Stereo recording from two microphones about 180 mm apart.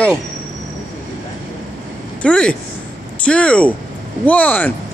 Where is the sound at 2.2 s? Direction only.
5° left (ahead or behind).